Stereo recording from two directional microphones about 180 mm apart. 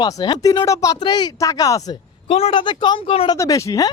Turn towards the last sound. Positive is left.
turn(degrees=20)  # may be behind; listen again after turning